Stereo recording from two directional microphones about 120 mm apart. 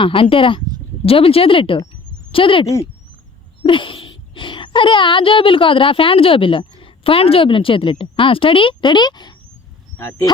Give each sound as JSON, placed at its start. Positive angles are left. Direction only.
{"t": 0.0, "sound": "speech", "side_deg": 50}